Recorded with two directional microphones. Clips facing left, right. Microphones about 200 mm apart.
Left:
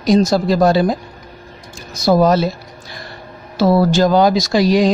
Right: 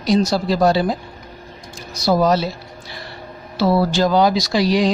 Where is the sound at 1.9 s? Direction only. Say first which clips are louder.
Left 3 dB; 50° left (ahead or behind).